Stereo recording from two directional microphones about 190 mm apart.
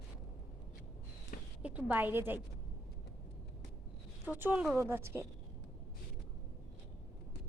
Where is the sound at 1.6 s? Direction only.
10° right (ahead or behind).